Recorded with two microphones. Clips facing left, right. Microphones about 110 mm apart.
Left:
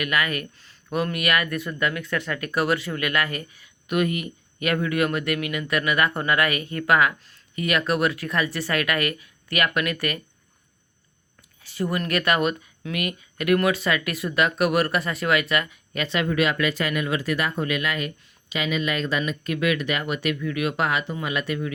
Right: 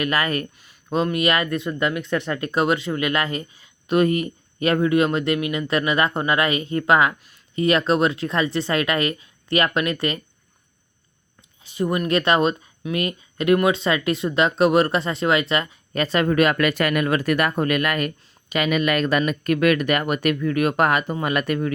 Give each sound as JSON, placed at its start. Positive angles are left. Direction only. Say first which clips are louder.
{"t": 0.0, "sound": "speech", "louder": "right 3 dB", "side_deg": -35}
{"t": 0.6, "sound": "a sound", "louder": "right 4 dB", "side_deg": -15}
{"t": 0.9, "sound": "speech", "louder": "right 4 dB", "side_deg": -25}
{"t": 11.6, "sound": "speech", "louder": "right 4 dB", "side_deg": -20}